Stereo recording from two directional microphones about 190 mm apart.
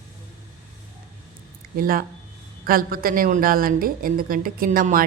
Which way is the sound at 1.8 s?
50° right (ahead or behind).